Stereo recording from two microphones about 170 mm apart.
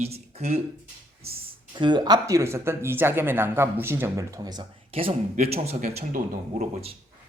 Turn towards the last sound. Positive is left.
turn(degrees=-55)  # may be behind; listen again after turning